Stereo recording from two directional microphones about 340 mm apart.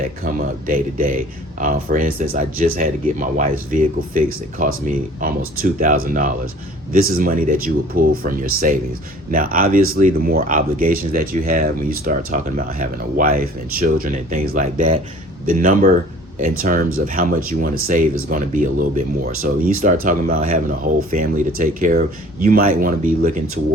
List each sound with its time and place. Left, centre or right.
0.3 s speech: right
5.8 s speech: right